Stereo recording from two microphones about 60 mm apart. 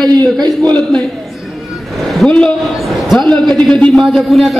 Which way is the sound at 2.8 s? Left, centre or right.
Centre.